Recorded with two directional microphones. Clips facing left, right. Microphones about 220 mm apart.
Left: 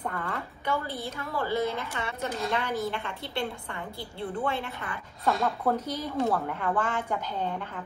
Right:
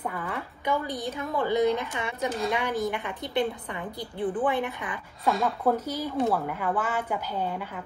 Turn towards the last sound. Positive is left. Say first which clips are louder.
# right 1 dB
turn(degrees=-10)  # may be behind; listen again after turning